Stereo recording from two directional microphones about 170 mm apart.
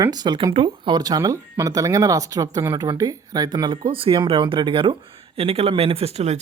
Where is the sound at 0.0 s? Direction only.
25° right (ahead or behind).